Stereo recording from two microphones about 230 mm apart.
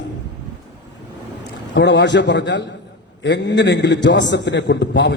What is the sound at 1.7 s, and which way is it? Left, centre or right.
A man's voice, left.